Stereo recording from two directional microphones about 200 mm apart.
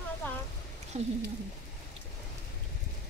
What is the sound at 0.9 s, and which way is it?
Speech, 35° right (ahead or behind).